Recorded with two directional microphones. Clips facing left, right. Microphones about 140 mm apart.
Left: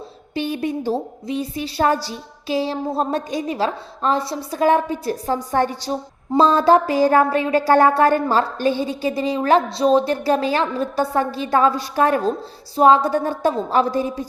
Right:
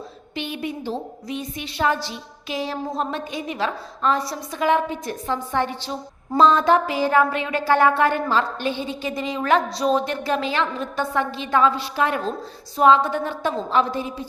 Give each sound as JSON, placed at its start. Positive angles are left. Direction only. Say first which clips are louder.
{"t": 0.3, "sound": "a woman's voice", "louder": "left 6 dB", "side_deg": 40}
{"t": 4.5, "sound": "a woman's voice", "louder": "left 3 dB", "side_deg": 40}